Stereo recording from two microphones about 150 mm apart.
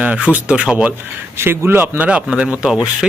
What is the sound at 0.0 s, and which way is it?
Speech, 10° right (ahead or behind).